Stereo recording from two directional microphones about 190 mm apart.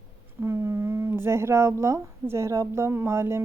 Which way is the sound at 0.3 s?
15° right (ahead or behind).